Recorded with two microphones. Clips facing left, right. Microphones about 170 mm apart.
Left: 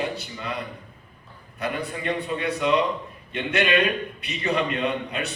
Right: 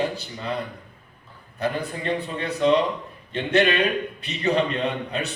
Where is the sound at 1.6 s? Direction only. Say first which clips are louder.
Right 2 dB; 35° right (ahead or behind).